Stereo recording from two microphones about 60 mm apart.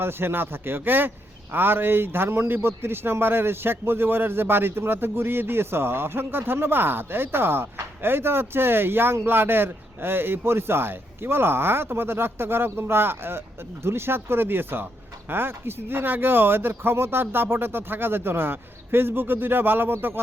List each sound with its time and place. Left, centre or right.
0.0 s speech: right